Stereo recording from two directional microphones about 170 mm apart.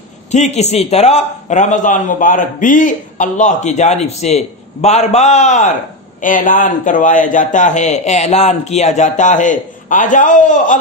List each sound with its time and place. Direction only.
0.3 s a man's voice: 40° left (ahead or behind)